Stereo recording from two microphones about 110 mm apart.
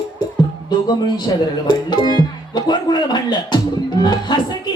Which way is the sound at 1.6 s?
40° left (ahead or behind).